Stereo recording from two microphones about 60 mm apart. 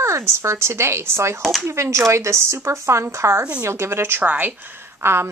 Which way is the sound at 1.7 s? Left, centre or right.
Right.